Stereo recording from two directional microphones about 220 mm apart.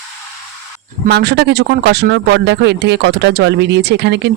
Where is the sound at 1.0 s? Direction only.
45° right (ahead or behind).